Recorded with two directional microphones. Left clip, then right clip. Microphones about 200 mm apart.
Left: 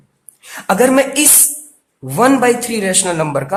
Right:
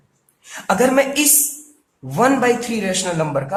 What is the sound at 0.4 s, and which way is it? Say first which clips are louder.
A woman's voice: left 4 dB; 30° left (ahead or behind).